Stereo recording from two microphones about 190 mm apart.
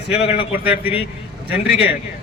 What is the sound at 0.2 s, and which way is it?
Speech, 5° right (ahead or behind).